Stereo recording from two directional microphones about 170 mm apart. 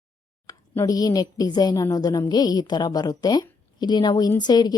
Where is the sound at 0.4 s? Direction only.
15° left (ahead or behind).